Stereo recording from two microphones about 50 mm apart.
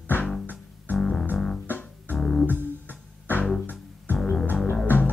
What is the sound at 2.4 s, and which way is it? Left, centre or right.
Music, left.